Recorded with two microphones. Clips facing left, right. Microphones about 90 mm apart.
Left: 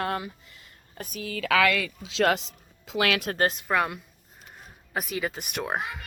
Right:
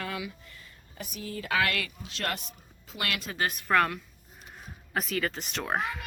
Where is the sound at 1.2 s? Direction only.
90° left.